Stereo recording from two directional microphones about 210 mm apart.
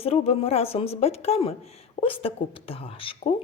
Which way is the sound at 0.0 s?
30° left (ahead or behind).